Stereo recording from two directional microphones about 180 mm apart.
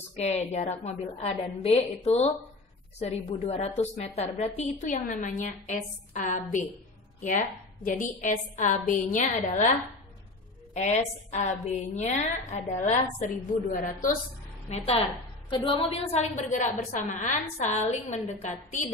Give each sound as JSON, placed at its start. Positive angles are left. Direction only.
{"t": 0.1, "sound": "a woman's voice", "side_deg": 35}
{"t": 14.7, "sound": "a woman's voice", "side_deg": 35}